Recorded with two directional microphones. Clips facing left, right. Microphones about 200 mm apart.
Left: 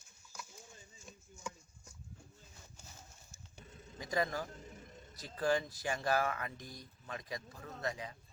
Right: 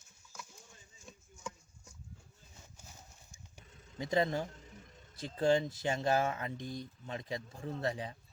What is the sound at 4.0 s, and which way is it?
Speech, 25° right (ahead or behind).